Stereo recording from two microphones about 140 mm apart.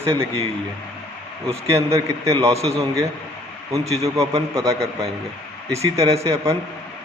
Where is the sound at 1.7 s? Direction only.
20° right (ahead or behind).